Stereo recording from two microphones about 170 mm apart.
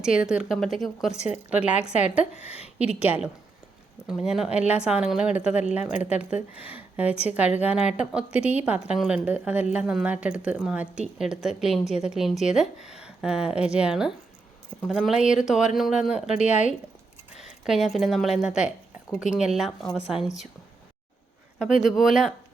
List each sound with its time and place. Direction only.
0.0 s a woman's voice: 5° right (ahead or behind)
2.3 s a woman's voice: 35° left (ahead or behind)
4.0 s a woman's voice: centre (ahead or behind)
16.5 s speech: 45° left (ahead or behind)
17.7 s speech: centre (ahead or behind)
21.8 s speech: centre (ahead or behind)